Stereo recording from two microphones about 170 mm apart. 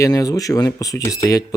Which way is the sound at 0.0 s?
20° left (ahead or behind).